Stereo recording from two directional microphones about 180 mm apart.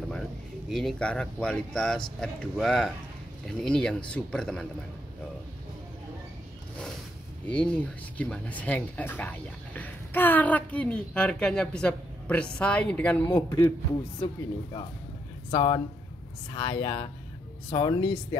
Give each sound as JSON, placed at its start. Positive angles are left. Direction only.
{"t": 0.7, "sound": "speech", "side_deg": 0}
{"t": 7.4, "sound": "speech", "side_deg": 5}
{"t": 13.3, "sound": "speech", "side_deg": 20}
{"t": 15.5, "sound": "speech", "side_deg": 30}